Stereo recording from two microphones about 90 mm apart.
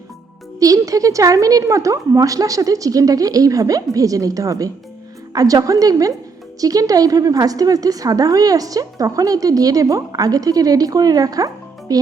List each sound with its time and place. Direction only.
0.6 s a woman's voice: 40° right (ahead or behind)